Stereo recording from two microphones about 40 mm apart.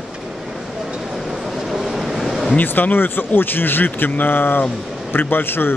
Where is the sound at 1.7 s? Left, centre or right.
Centre.